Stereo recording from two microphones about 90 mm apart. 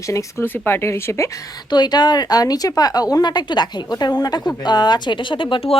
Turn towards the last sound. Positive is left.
turn(degrees=80)